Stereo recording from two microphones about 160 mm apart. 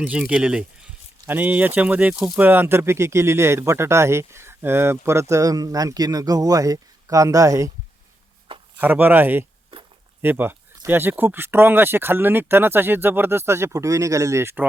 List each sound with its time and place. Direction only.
0.0 s speech: 10° right (ahead or behind)
8.8 s speech: 10° right (ahead or behind)